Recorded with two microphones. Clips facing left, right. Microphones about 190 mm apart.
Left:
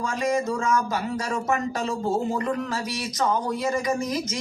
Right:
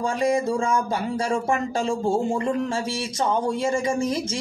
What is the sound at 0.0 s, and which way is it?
A man's voice, 30° right (ahead or behind).